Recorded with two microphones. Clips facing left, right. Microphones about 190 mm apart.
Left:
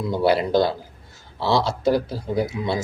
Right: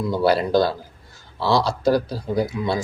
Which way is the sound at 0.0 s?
20° left (ahead or behind).